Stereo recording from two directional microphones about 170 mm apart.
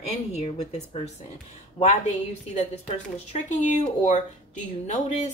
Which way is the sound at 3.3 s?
45° left (ahead or behind).